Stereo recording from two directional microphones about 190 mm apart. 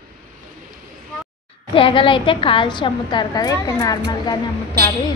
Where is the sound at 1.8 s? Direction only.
25° left (ahead or behind).